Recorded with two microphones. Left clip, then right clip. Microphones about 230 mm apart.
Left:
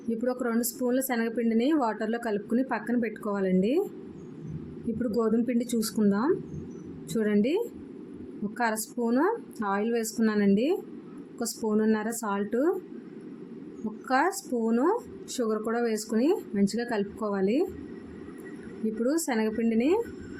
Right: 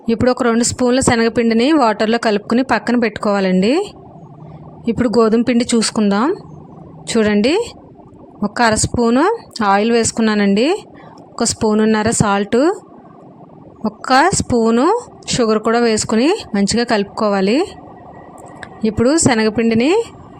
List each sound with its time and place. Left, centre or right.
0.1 s speech: right
4.9 s speech: right
14.1 s speech: right
18.9 s speech: right